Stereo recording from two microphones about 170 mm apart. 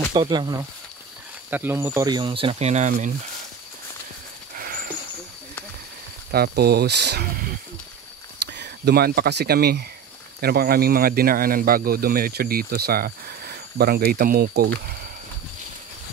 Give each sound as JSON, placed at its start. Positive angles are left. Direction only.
{"t": 0.1, "sound": "speech", "side_deg": -25}
{"t": 1.5, "sound": "speech", "side_deg": -10}
{"t": 2.0, "sound": "speech", "side_deg": -25}
{"t": 4.6, "sound": "wild animals", "side_deg": -55}
{"t": 6.3, "sound": "speech", "side_deg": -70}
{"t": 8.5, "sound": "speech", "side_deg": -80}